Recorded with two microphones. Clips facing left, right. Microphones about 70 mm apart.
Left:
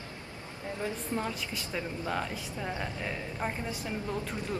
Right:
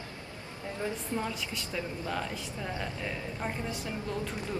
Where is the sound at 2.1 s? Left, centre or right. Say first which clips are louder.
Left 1 dB; centre.